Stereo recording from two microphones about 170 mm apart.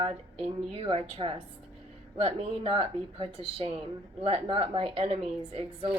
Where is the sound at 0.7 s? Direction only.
35° right (ahead or behind).